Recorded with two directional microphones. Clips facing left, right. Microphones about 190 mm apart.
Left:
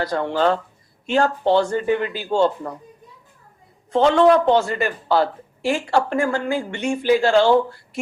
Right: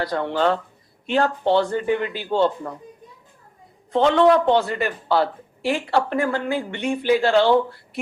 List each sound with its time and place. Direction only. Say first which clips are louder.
0.1 s speech: left 2 dB; 40° left (ahead or behind)
3.9 s a woman's voice: left 1 dB; 40° left (ahead or behind)